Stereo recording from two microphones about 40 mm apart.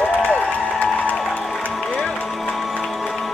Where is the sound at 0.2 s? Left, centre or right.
Left.